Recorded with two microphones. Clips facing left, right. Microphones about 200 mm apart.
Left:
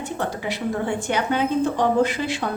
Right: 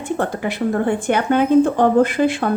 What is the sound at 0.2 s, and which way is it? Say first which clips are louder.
A woman's voice: right 4 dB; 55° right (ahead or behind).